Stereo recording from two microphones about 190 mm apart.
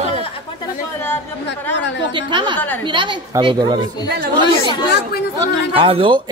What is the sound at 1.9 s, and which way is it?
Speech, 65° left (ahead or behind).